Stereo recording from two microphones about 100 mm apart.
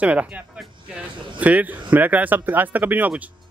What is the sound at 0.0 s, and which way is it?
Speech, 15° right (ahead or behind).